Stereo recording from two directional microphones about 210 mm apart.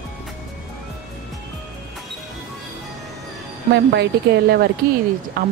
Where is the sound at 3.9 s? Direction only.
50° right (ahead or behind).